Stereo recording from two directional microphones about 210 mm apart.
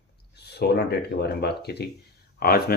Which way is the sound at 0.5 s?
50° left (ahead or behind).